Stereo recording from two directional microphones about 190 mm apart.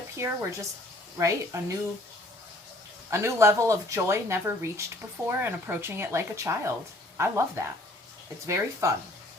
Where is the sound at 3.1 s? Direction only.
15° right (ahead or behind).